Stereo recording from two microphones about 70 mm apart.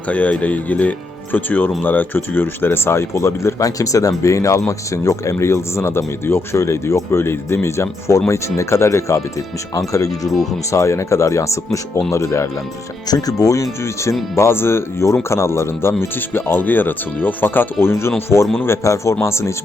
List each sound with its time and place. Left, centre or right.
0.1 s speech: left
9.7 s speech: left
10.2 s speech: centre
10.7 s speech: left
13.1 s speech: left
13.4 s speech: left